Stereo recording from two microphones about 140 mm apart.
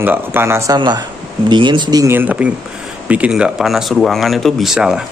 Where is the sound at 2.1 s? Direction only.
15° right (ahead or behind).